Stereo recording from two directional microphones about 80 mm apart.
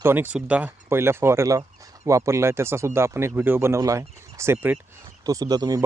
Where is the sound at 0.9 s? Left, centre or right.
Right.